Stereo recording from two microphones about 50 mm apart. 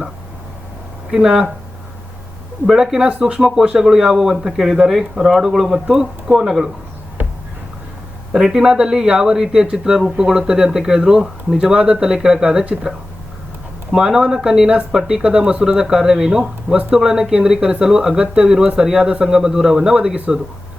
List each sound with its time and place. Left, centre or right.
1.1 s speech: centre
2.6 s speech: centre
3.1 s speech: right
3.4 s speech: centre
8.3 s speech: centre
13.9 s speech: centre